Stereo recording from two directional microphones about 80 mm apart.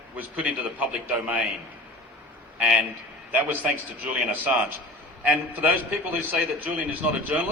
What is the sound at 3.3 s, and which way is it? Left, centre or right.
A man's voice, centre.